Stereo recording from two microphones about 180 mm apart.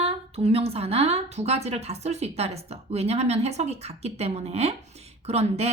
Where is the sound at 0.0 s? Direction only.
35° right (ahead or behind).